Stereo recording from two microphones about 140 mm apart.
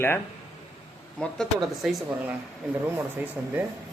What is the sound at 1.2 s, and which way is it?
Speech, centre (ahead or behind).